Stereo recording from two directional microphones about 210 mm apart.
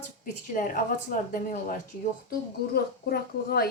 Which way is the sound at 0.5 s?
40° left (ahead or behind).